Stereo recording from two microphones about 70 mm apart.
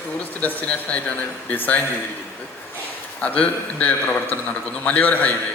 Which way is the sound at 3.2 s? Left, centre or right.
Left.